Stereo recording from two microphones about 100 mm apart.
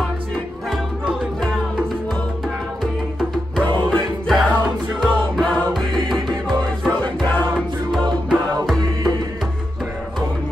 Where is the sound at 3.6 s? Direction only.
45° right (ahead or behind).